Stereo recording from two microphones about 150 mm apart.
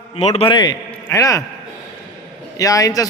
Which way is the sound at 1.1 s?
20° left (ahead or behind).